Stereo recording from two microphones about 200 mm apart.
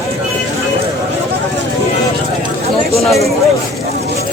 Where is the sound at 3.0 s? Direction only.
Centre (ahead or behind).